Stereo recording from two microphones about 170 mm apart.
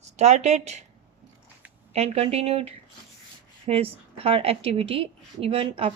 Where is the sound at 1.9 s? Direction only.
35° right (ahead or behind).